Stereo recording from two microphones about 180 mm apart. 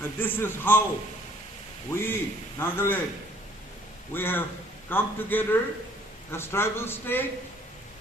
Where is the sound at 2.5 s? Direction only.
10° left (ahead or behind).